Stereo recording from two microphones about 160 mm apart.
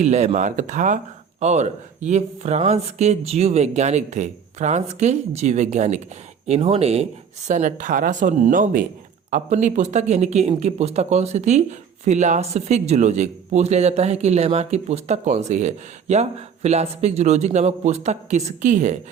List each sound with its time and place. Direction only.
0.0 s speech: 45° right (ahead or behind)